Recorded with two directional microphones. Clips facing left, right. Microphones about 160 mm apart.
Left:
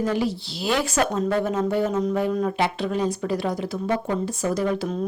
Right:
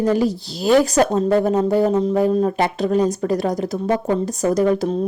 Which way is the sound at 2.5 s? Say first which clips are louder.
Right 6 dB; 45° right (ahead or behind).